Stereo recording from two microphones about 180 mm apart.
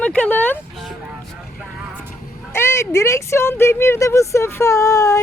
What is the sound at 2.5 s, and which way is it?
Speech, 15° left (ahead or behind).